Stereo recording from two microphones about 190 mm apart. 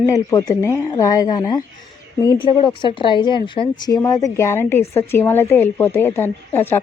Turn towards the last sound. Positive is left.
turn(degrees=10)  # may be behind; listen again after turning